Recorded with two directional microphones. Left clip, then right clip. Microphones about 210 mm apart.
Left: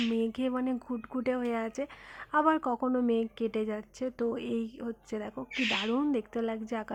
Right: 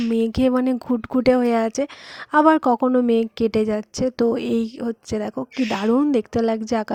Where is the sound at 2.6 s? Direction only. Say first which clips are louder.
Right 13 dB; 35° right (ahead or behind).